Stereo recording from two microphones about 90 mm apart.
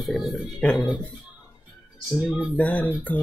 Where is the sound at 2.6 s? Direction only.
20° left (ahead or behind).